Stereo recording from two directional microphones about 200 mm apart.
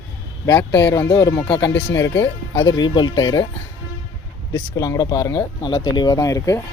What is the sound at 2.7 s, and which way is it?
Speech, 20° left (ahead or behind).